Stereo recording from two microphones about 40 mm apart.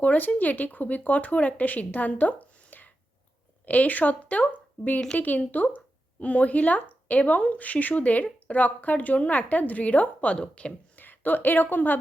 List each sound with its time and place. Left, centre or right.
0.0 s speech: left
10.3 s speech: left
10.9 s a woman's voice: left